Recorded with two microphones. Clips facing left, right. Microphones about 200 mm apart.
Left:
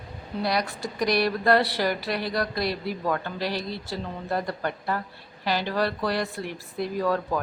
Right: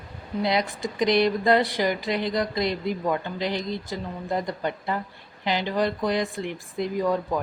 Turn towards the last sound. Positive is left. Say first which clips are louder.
# right 1 dB
turn(degrees=-15)  # may be behind; listen again after turning